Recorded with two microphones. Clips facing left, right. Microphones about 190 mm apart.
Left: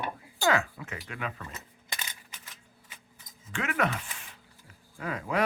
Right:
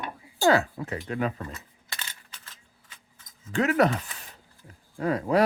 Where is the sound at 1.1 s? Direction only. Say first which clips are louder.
Right 9 dB; 35° right (ahead or behind).